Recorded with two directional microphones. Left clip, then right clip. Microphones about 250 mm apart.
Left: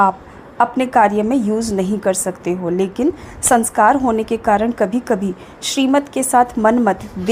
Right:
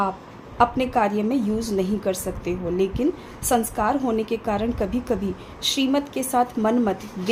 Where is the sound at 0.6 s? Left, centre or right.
Left.